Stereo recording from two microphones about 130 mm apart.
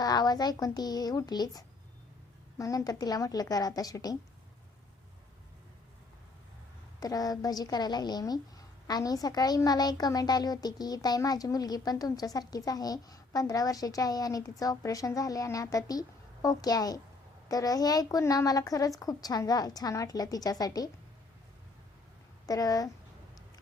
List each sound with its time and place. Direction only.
0.0 s a woman's voice: 30° left (ahead or behind)
7.0 s a woman's voice: 30° left (ahead or behind)
22.4 s a woman's voice: 30° left (ahead or behind)